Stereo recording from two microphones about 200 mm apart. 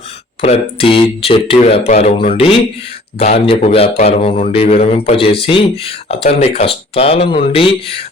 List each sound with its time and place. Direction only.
0.4 s a man's voice: 30° left (ahead or behind)